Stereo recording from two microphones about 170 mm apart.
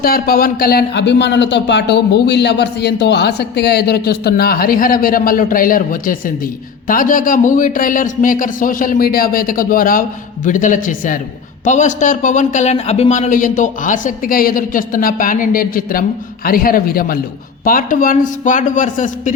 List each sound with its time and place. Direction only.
0.0 s a man's voice: 60° left (ahead or behind)